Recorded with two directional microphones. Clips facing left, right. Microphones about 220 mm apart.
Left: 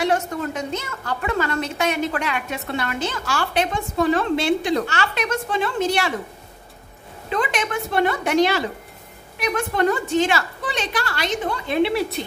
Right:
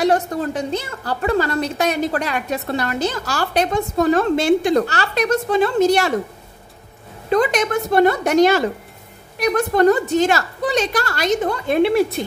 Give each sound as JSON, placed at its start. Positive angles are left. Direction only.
{"t": 0.0, "sound": "a woman's voice", "side_deg": -35}
{"t": 7.2, "sound": "a woman's voice", "side_deg": -40}